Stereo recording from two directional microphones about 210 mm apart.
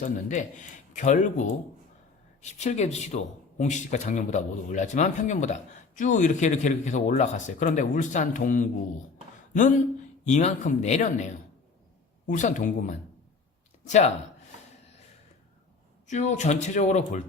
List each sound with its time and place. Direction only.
0.9 s a man's voice: 35° left (ahead or behind)
2.4 s a man's voice: 35° left (ahead or behind)
16.0 s a man's voice: 35° left (ahead or behind)